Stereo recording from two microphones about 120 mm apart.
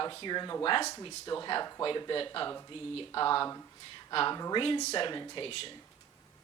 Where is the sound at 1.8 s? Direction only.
45° left (ahead or behind).